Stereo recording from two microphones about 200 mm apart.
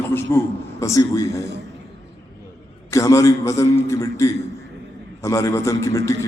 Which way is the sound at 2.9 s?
15° left (ahead or behind).